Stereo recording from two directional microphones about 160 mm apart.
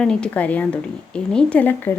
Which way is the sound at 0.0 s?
5° left (ahead or behind).